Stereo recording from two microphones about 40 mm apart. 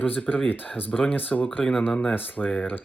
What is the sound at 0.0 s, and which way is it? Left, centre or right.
Speech, left.